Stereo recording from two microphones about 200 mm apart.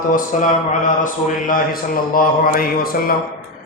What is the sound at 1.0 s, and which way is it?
Speech, 40° left (ahead or behind).